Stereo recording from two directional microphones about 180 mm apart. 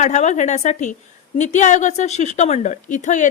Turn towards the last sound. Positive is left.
turn(degrees=45)  # may be behind; listen again after turning